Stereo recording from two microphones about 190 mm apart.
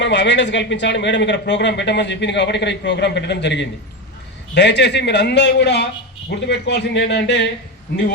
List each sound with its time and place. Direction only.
0.0 s speech: 65° left (ahead or behind)